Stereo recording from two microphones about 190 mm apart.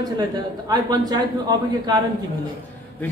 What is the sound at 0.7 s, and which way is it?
Speech, 20° right (ahead or behind).